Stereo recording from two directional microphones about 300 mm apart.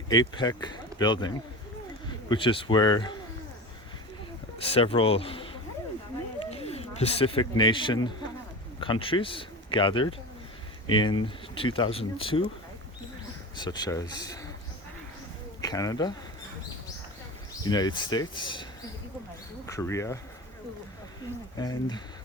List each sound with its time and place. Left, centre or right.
0.1 s speech: centre
2.3 s speech: centre
4.6 s speech: centre
6.5 s speech: centre
13.6 s speech: centre
15.6 s speech: centre
17.6 s speech: centre
21.6 s speech: centre